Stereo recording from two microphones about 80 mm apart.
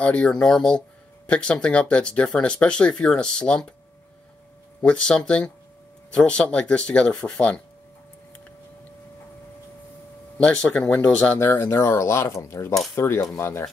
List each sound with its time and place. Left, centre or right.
0.0 s speech: centre
4.8 s speech: centre
10.3 s speech: centre
11.3 s speech: left